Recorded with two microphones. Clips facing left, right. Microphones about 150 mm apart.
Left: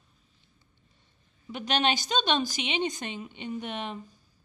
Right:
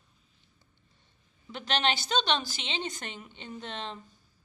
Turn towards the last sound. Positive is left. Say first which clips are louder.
# left 5 dB
turn(degrees=15)  # may be behind; listen again after turning